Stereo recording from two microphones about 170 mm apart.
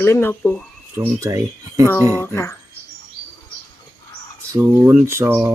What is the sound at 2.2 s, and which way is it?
Speech, 15° left (ahead or behind).